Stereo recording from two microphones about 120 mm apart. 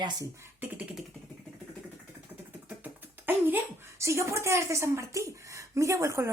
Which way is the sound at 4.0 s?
25° right (ahead or behind).